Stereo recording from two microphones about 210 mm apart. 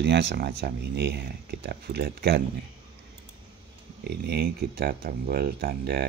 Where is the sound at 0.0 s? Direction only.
55° right (ahead or behind).